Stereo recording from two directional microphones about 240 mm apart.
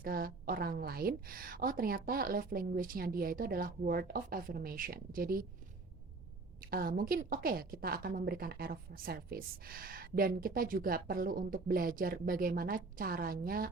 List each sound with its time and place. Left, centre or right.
0.0 s a woman's voice: right
6.6 s a woman's voice: right